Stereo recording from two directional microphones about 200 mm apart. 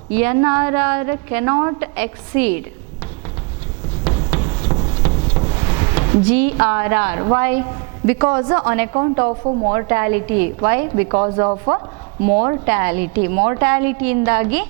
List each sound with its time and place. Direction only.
0.1 s a woman's voice: 10° right (ahead or behind)
4.0 s a sound: 30° right (ahead or behind)
6.2 s a woman's voice: 10° right (ahead or behind)
9.4 s a woman's voice: 30° right (ahead or behind)
9.7 s a woman's voice: 15° right (ahead or behind)
12.3 s a woman's voice: 15° right (ahead or behind)